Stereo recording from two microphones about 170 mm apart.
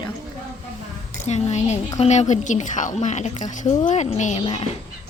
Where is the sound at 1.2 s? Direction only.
40° left (ahead or behind).